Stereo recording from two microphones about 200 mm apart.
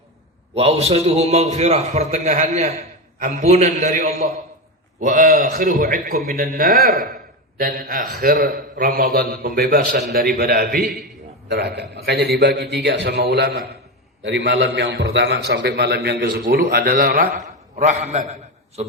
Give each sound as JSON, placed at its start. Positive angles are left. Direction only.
{"t": 0.5, "sound": "a man's voice", "side_deg": -30}